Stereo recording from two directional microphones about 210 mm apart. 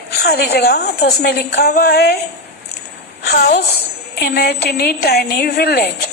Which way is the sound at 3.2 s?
50° left (ahead or behind).